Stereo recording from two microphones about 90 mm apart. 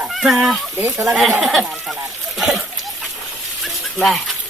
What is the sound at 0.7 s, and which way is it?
Speech, 35° right (ahead or behind).